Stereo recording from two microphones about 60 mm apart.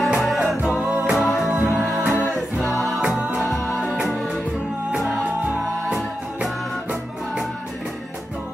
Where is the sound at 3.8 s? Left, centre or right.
Centre.